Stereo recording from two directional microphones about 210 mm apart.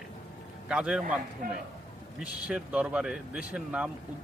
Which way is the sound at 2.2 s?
5° right (ahead or behind).